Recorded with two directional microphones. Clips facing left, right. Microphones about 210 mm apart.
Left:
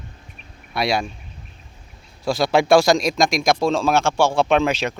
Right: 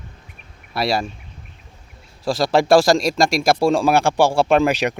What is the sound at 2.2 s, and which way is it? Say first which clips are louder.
Speech: right 1 dB; centre (ahead or behind).